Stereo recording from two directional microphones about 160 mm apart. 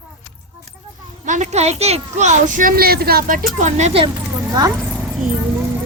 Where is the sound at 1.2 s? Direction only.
50° right (ahead or behind); by 3.4 s 65° right (ahead or behind).